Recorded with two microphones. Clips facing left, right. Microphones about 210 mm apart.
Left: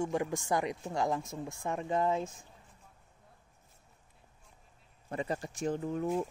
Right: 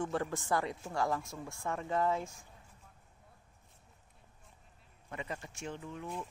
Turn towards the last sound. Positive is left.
turn(degrees=45)  # may be behind; listen again after turning